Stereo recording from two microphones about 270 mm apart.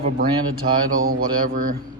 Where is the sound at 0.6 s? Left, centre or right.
Right.